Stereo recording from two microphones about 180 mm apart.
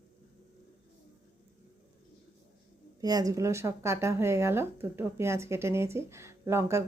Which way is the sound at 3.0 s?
20° right (ahead or behind).